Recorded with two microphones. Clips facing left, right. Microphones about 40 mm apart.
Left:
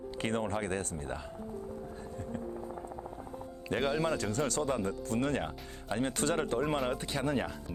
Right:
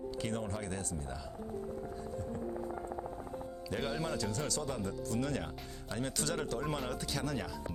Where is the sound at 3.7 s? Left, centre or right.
Left.